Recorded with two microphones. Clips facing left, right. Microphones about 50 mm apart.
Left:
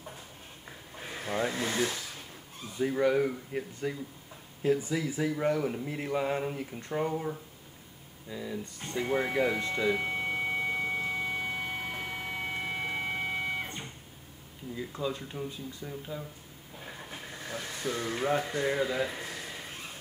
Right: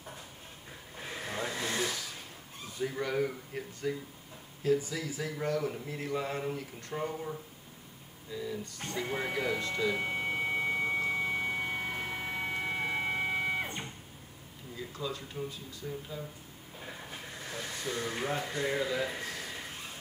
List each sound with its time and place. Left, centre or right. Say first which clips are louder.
1.0 s vehicle: left 5 dB; centre
2.8 s speech: left 6 dB; centre
4.6 s speech: left 2 dB; left
10.0 s a sound: left 1 dB; centre
14.8 s speech: left 4 dB; centre
17.8 s speech: left 4 dB; centre